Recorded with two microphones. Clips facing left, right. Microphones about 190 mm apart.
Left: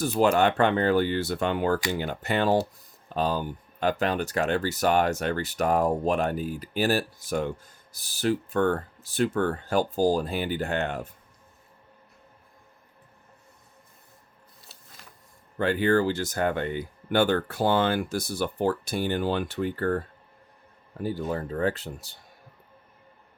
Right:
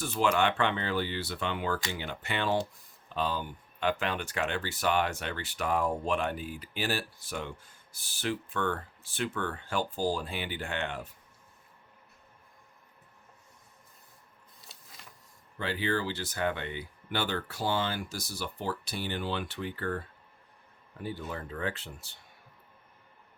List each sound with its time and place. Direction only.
0.0 s speech: 40° left (ahead or behind)
14.7 s printer: centre (ahead or behind)
15.5 s speech: 50° left (ahead or behind)